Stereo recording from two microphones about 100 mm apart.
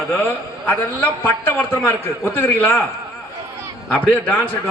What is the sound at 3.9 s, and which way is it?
Speech, 15° left (ahead or behind).